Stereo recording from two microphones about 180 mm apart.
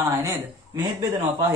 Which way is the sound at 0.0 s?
15° right (ahead or behind).